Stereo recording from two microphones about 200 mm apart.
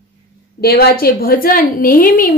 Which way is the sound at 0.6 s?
50° left (ahead or behind).